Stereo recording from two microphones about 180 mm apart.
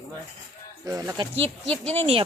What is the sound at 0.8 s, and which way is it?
Speech, 20° right (ahead or behind).